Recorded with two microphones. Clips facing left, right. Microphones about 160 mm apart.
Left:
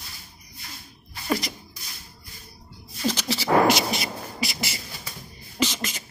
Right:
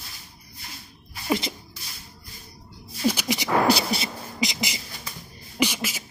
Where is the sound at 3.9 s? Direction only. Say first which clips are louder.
Right 2 dB; 35° right (ahead or behind).